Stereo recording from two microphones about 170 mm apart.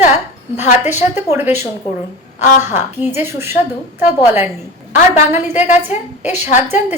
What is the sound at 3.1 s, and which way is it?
A woman's voice, 15° right (ahead or behind).